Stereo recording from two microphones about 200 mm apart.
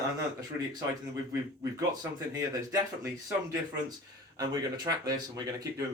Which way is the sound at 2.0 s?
15° right (ahead or behind).